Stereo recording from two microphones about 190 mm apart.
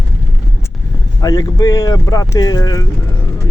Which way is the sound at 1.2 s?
20° left (ahead or behind).